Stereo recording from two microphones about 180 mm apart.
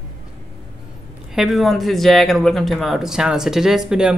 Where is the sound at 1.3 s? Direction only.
Centre (ahead or behind).